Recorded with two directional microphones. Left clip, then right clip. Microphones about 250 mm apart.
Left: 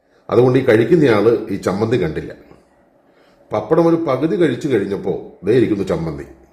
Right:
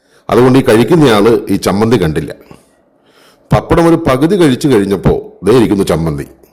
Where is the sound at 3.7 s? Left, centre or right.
Right.